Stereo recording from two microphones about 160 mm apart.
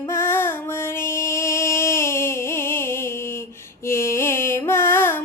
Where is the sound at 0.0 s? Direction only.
15° left (ahead or behind).